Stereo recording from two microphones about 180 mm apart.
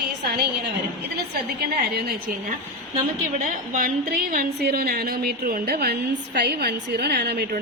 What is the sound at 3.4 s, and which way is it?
A woman's voice, 50° right (ahead or behind).